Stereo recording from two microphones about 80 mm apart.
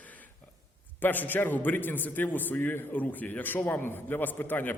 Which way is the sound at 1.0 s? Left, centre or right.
Left.